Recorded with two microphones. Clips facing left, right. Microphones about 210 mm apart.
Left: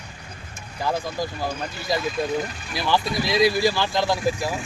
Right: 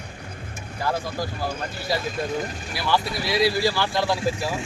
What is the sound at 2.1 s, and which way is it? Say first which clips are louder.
Speech: left 2 dB; 45° right (ahead or behind).